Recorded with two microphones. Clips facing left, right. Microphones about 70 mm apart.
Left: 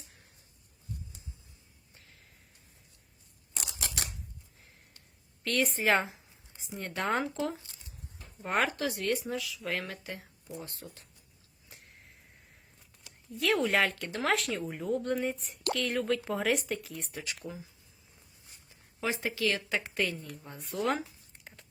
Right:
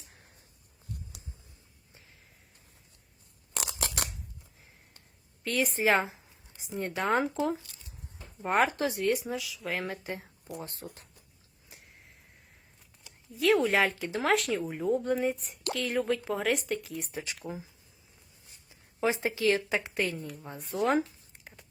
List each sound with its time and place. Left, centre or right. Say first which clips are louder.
3.7 s scissors: right 3 dB; right
5.4 s a woman's voice: right 1 dB; centre
6.7 s speech: right 3 dB; centre
7.3 s speech: right 4 dB; centre
9.0 s speech: right 3 dB; centre
9.8 s speech: right 5 dB; right
10.6 s speech: right 3 dB; right
11.7 s a sound: even; centre
13.3 s speech: right 3 dB; centre
17.1 s speech: right 3 dB; right
18.9 s speech: right 4 dB; right
21.3 s a sound: right 1 dB; centre